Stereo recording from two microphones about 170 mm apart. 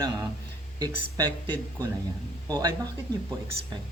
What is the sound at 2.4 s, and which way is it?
Speech, 25° right (ahead or behind).